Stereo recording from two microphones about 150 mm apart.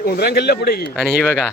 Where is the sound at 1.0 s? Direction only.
5° left (ahead or behind).